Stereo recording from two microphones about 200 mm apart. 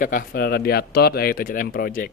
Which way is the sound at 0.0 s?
50° left (ahead or behind).